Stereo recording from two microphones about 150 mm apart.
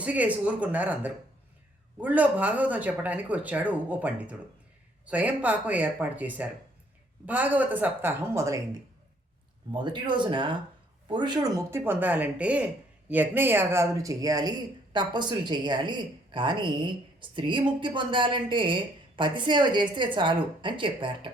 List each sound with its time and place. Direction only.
0.0 s speech: 10° right (ahead or behind)
9.7 s speech: 30° right (ahead or behind)